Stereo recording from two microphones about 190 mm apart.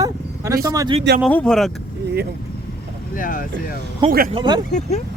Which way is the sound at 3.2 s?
45° left (ahead or behind).